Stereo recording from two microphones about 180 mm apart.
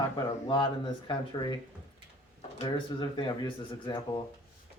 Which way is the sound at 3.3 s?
25° left (ahead or behind).